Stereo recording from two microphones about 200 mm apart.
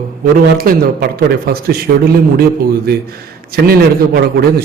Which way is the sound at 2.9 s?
50° right (ahead or behind).